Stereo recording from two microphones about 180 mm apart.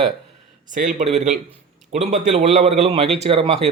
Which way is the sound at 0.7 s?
45° right (ahead or behind).